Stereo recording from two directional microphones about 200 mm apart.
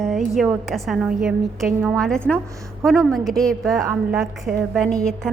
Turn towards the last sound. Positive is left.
turn(degrees=5)  # may be behind; listen again after turning